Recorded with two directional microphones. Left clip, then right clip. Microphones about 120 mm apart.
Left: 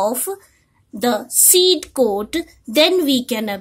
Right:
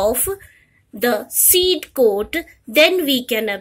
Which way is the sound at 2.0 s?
15° left (ahead or behind).